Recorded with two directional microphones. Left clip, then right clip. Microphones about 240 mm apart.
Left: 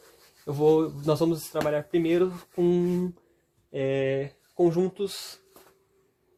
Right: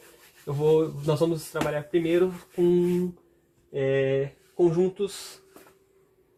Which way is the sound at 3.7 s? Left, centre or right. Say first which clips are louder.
Right 2 dB; left.